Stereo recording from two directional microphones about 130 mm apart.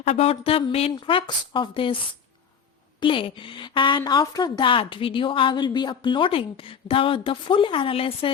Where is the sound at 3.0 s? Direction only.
40° left (ahead or behind).